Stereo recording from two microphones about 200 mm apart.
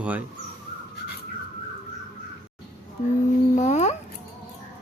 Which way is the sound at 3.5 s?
35° left (ahead or behind).